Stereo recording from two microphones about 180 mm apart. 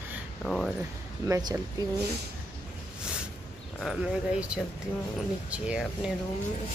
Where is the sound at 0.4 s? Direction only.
5° left (ahead or behind).